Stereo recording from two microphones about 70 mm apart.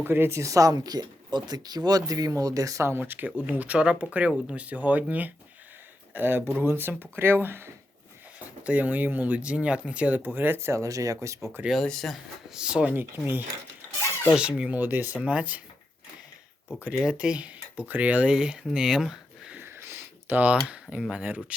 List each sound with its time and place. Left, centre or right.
0.0 s speech: right
0.3 s speech: right
3.0 s speech: right
8.4 s speech: right
10.2 s speech: right
11.7 s speech: centre
12.5 s speech: centre
12.9 s speech: right
14.3 s speech: centre
14.8 s speech: right
16.6 s speech: centre
19.5 s a sound: right
21.2 s speech: right